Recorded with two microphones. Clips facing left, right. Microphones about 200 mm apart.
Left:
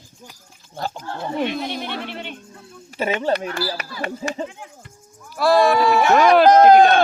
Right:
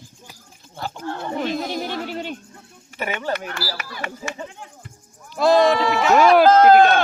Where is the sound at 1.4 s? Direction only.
40° right (ahead or behind).